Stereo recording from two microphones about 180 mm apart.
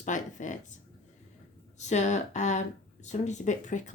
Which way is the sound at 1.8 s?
40° left (ahead or behind).